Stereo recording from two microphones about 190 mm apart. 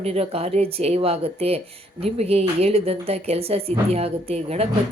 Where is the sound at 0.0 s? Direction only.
30° right (ahead or behind).